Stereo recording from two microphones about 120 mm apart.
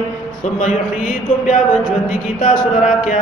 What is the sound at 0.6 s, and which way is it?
Music, 90° left.